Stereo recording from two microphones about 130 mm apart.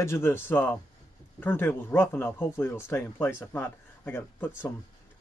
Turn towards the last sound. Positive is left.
turn(degrees=15)  # may be behind; listen again after turning